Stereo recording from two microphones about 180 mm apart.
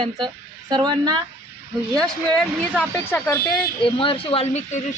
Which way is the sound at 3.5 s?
30° left (ahead or behind).